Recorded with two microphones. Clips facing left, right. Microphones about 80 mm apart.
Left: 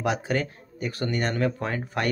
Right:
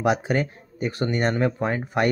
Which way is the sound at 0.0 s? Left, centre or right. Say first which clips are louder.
Right 4 dB; right.